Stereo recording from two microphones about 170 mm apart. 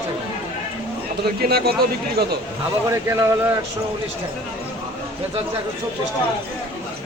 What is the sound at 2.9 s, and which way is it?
Speech, 15° right (ahead or behind).